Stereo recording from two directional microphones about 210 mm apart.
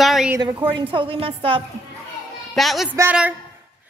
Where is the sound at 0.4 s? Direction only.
20° right (ahead or behind).